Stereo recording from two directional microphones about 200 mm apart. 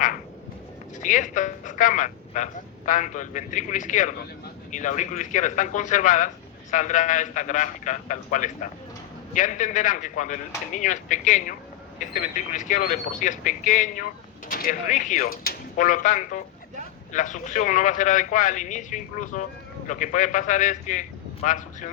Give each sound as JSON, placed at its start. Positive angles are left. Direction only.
{"t": 1.0, "sound": "a man's voice", "side_deg": 40}